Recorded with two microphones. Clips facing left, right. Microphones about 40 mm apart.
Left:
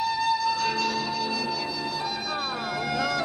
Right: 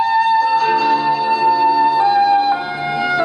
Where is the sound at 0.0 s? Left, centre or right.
Right.